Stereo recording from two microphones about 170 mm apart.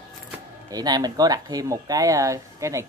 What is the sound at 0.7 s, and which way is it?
Speech, 25° right (ahead or behind).